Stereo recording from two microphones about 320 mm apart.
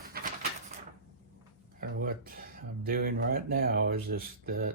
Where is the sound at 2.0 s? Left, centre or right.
Right.